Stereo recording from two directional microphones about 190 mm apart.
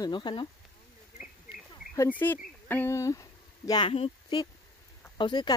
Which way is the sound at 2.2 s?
15° left (ahead or behind).